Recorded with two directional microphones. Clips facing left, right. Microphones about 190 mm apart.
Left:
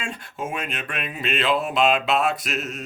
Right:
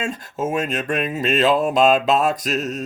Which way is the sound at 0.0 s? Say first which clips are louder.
Right 7 dB; 40° right (ahead or behind).